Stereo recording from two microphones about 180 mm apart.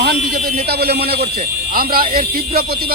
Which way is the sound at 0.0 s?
65° right (ahead or behind).